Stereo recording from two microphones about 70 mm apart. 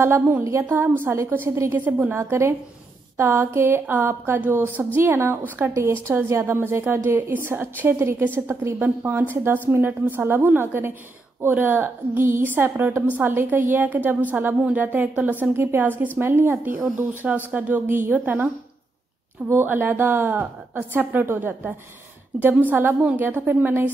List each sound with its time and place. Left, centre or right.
0.0 s a woman's voice: right
0.7 s a woman's voice: right
2.1 s a woman's voice: right
8.7 s a woman's voice: right
15.5 s a woman's voice: right
19.5 s a woman's voice: right